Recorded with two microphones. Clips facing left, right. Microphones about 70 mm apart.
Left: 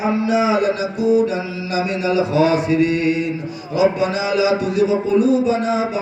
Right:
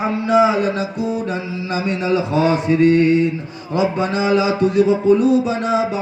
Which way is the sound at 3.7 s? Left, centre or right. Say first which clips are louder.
Left 1 dB; right.